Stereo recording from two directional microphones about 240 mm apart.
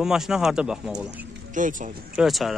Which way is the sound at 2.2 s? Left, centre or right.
Centre.